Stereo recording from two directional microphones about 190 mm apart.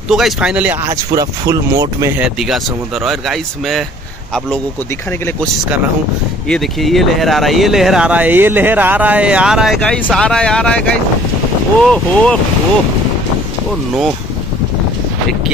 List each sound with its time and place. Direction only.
0.1 s speech: 5° right (ahead or behind)
0.8 s speech: 20° right (ahead or behind)
2.2 s speech: centre (ahead or behind)
6.5 s speech: centre (ahead or behind)
11.8 s speech: 5° left (ahead or behind)